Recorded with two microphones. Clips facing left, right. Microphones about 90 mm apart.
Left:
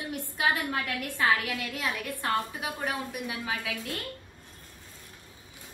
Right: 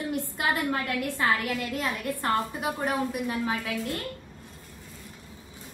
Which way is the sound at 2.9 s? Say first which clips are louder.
Right 5 dB; 50° right (ahead or behind).